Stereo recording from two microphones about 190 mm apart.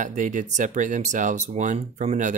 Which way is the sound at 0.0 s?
40° right (ahead or behind).